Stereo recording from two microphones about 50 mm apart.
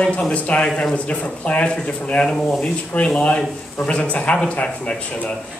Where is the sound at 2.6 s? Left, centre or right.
Left.